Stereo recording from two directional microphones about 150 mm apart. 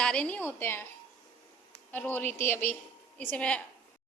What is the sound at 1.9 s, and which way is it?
A woman's voice, 10° left (ahead or behind).